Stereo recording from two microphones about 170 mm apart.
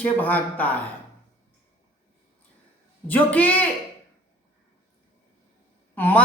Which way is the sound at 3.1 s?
10° left (ahead or behind).